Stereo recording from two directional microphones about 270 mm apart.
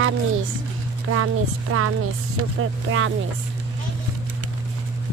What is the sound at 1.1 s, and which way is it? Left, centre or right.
Speech, right.